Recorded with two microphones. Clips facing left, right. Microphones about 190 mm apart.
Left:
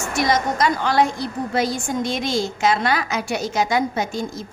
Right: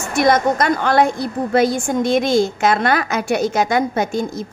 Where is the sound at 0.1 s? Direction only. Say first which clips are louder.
Right 6 dB; 55° right (ahead or behind).